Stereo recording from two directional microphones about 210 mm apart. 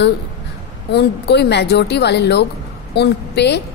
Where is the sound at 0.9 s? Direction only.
50° left (ahead or behind).